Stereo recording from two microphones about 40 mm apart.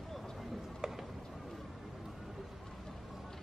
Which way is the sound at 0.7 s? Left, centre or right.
Centre.